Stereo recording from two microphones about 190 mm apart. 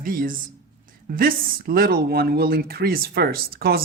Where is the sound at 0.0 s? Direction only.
45° right (ahead or behind).